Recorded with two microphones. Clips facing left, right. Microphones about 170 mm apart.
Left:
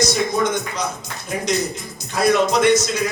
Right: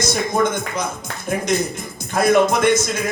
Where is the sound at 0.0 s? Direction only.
50° right (ahead or behind).